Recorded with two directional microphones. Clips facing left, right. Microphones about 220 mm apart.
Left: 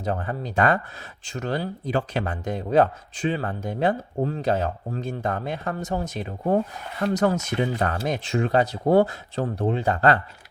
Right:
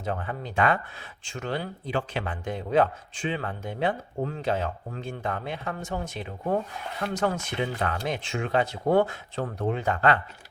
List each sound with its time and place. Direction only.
0.0 s speech: 40° left (ahead or behind)